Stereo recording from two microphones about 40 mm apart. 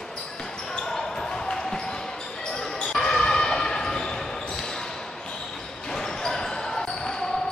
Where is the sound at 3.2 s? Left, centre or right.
Left.